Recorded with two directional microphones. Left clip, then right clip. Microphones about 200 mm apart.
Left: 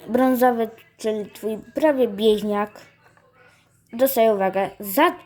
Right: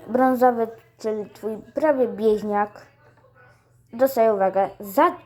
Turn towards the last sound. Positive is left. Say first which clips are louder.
# even
turn(degrees=30)  # may be behind; listen again after turning